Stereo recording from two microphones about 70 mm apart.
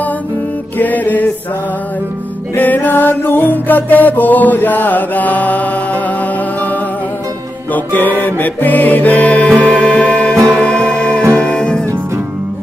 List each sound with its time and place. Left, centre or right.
0.7 s music: left
2.5 s music: left